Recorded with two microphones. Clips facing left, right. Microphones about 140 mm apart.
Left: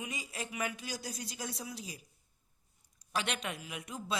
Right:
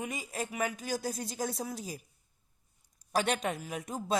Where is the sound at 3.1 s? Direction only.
40° right (ahead or behind).